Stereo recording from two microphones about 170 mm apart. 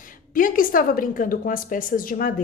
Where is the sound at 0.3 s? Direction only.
55° left (ahead or behind).